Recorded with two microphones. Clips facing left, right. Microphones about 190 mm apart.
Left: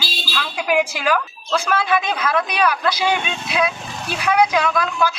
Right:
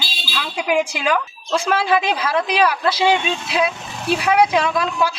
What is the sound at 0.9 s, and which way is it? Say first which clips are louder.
A woman's voice: even; 20° right (ahead or behind).